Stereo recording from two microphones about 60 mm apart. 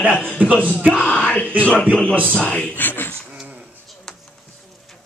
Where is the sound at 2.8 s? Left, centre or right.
Left.